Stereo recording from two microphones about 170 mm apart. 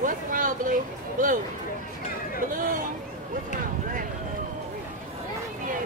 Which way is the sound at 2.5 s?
55° right (ahead or behind).